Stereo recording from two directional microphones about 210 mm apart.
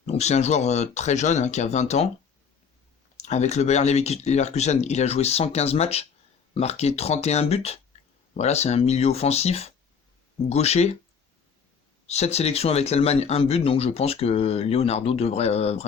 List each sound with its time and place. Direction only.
0.0 s speech: 30° left (ahead or behind)
3.2 s speech: 35° left (ahead or behind)
12.0 s speech: 30° left (ahead or behind)